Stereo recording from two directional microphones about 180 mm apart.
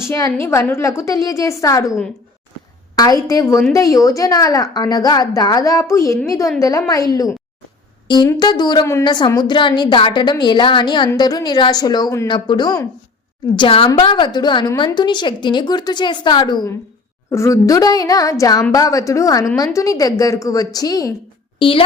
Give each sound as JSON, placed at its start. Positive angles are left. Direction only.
{"t": 0.3, "sound": "a woman's voice", "side_deg": 15}